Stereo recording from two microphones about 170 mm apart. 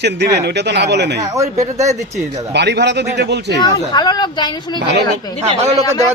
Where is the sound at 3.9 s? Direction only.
25° left (ahead or behind).